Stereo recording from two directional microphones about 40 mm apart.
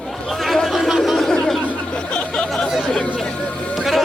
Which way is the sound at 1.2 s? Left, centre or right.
Centre.